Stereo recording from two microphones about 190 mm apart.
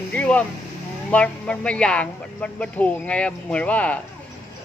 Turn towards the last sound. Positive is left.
turn(degrees=5)  # may be behind; listen again after turning